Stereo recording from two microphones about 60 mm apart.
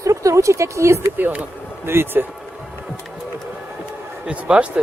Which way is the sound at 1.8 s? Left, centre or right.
Right.